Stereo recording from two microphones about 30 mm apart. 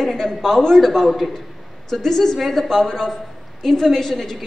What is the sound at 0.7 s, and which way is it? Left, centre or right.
A man's voice, centre.